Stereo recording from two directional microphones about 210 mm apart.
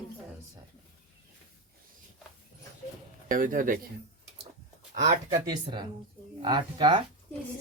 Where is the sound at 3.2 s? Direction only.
40° right (ahead or behind).